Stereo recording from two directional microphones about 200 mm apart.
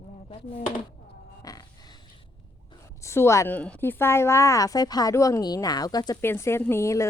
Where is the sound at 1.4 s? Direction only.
20° left (ahead or behind).